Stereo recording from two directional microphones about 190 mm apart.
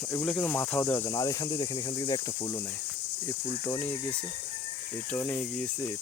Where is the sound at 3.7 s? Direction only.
10° left (ahead or behind).